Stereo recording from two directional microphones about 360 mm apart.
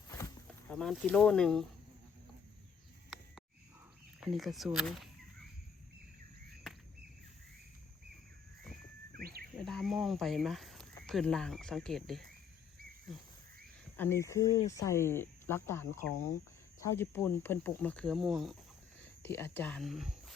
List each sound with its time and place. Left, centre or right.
0.7 s speech: centre
4.2 s speech: centre
9.1 s cricket: right
9.6 s speech: centre
13.9 s speech: centre